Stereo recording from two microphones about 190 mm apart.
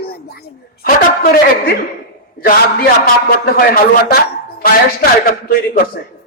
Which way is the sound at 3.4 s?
50° left (ahead or behind).